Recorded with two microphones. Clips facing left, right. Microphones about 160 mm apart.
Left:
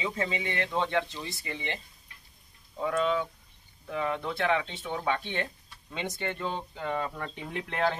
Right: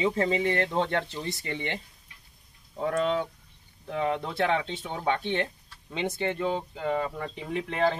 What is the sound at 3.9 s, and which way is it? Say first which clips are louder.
Speech: right 3 dB; 30° right (ahead or behind).